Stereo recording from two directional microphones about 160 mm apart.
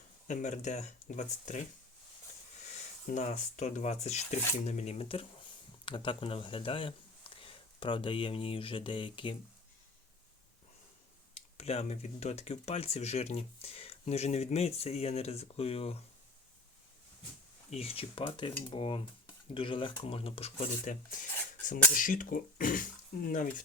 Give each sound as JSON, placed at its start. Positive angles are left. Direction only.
{"t": 0.3, "sound": "speech", "side_deg": 50}
{"t": 3.1, "sound": "speech", "side_deg": 45}
{"t": 11.3, "sound": "speech", "side_deg": 40}
{"t": 17.7, "sound": "speech", "side_deg": 35}